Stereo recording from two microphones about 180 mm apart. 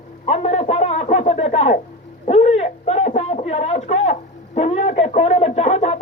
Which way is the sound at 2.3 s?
40° left (ahead or behind).